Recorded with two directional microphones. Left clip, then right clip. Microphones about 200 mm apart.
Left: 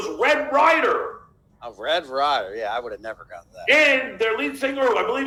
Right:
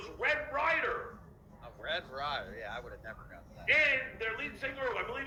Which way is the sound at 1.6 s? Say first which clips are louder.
Left 14 dB; 45° left (ahead or behind).